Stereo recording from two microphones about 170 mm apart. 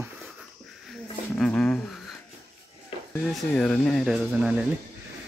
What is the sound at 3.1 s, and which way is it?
Speech, 5° left (ahead or behind).